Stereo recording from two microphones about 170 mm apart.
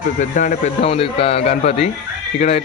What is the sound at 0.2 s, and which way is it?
Speech, 45° left (ahead or behind).